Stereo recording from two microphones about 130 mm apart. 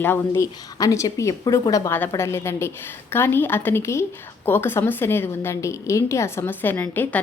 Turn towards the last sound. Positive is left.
turn(degrees=15)  # may be behind; listen again after turning